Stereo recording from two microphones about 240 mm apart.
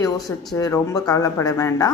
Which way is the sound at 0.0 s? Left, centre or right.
Centre.